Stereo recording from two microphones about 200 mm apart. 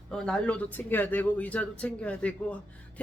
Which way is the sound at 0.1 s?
5° left (ahead or behind).